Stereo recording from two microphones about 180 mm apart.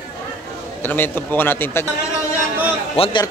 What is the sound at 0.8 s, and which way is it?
A man's voice, 10° left (ahead or behind).